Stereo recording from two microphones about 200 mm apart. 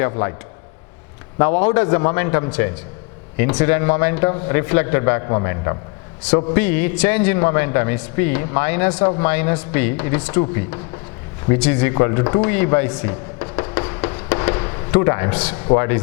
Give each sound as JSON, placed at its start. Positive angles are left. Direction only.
{"t": 0.0, "sound": "a man's voice", "side_deg": 15}
{"t": 1.4, "sound": "a man's voice", "side_deg": 10}
{"t": 11.4, "sound": "a sound", "side_deg": 15}
{"t": 14.9, "sound": "a man's voice", "side_deg": 15}